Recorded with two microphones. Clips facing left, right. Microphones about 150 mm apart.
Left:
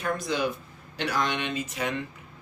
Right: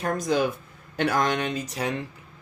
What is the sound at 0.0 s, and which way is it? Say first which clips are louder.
Speech: right 4 dB; 40° right (ahead or behind).